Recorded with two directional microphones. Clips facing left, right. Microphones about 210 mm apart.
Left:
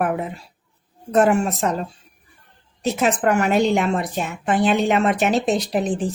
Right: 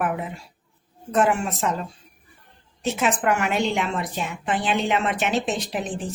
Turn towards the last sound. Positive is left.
turn(degrees=40)  # may be behind; listen again after turning